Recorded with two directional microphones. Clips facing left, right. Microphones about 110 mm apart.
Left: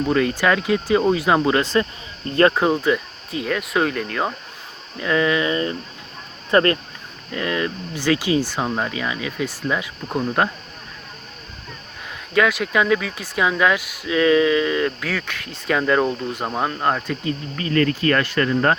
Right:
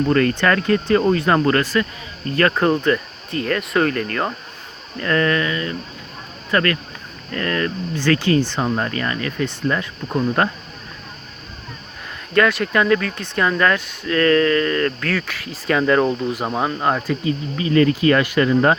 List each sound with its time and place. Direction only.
0.0 s speech: 10° left (ahead or behind)
1.6 s speech: 25° left (ahead or behind)
2.5 s speech: 10° left (ahead or behind)
5.5 s speech: 30° left (ahead or behind)
7.3 s speech: 15° left (ahead or behind)
12.3 s speech: 5° left (ahead or behind)